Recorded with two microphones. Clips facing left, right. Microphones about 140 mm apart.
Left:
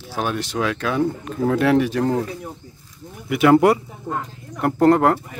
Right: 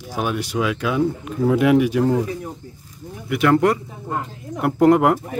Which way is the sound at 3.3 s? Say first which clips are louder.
Left 3 dB; 10° left (ahead or behind).